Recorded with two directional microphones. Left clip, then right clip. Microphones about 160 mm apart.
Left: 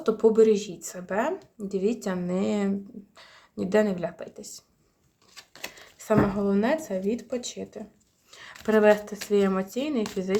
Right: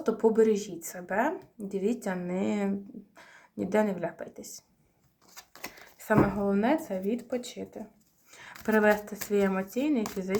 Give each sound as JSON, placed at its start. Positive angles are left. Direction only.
{"t": 0.0, "sound": "speech", "side_deg": 30}
{"t": 6.1, "sound": "speech", "side_deg": 30}
{"t": 8.4, "sound": "a sound", "side_deg": 25}
{"t": 9.0, "sound": "speech", "side_deg": 25}
{"t": 9.4, "sound": "speech", "side_deg": 35}